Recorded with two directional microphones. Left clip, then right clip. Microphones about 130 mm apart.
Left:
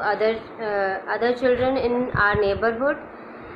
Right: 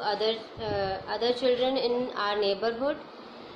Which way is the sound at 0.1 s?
30° right (ahead or behind).